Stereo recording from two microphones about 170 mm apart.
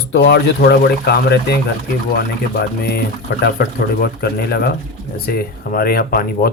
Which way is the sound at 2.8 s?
65° left (ahead or behind).